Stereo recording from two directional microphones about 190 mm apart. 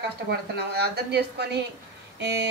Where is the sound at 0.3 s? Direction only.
60° right (ahead or behind).